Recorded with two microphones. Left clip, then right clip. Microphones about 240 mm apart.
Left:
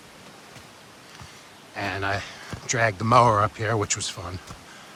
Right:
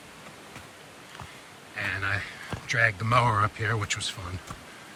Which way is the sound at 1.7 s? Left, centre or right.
Centre.